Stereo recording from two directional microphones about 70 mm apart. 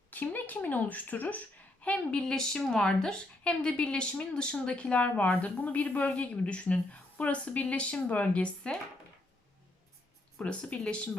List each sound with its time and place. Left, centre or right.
0.1 s speech: left
10.4 s speech: centre